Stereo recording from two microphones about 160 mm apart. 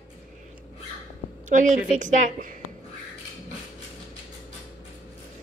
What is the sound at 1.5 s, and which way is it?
A woman's voice, 50° right (ahead or behind).